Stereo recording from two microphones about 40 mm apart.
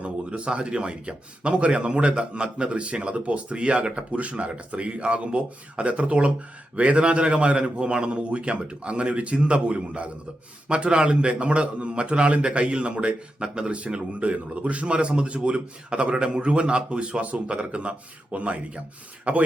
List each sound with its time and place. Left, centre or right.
0.0 s a man's voice: right